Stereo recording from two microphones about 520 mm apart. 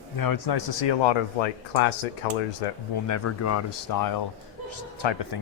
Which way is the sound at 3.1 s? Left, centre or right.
Left.